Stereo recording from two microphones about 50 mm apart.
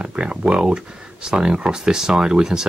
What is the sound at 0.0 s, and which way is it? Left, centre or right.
Speech, right.